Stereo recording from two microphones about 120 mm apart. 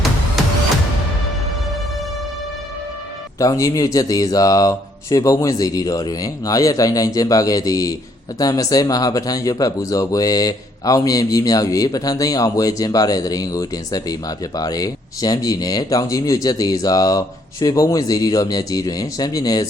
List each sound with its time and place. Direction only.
0.4 s music: centre (ahead or behind)
3.3 s speech: 30° left (ahead or behind)